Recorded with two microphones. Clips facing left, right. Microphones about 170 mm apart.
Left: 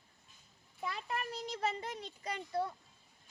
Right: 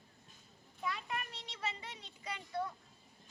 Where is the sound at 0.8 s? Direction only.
35° left (ahead or behind).